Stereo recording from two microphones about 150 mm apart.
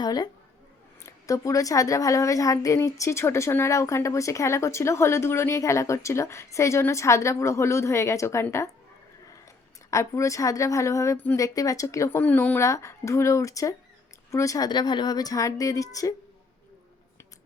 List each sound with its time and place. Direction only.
0.0 s a woman's voice: 25° left (ahead or behind)
9.9 s a woman's voice: 20° left (ahead or behind)